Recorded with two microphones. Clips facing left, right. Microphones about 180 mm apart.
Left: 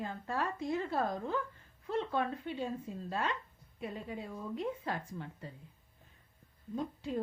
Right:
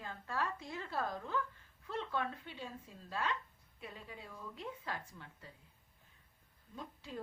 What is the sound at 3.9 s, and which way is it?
Speech, 50° left (ahead or behind).